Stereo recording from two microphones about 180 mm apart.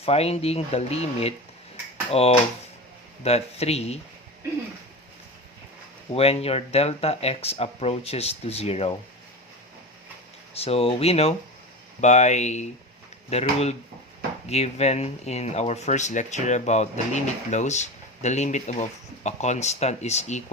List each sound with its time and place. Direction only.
0.0 s speech: 35° left (ahead or behind)
6.1 s speech: 35° left (ahead or behind)
10.5 s speech: 35° left (ahead or behind)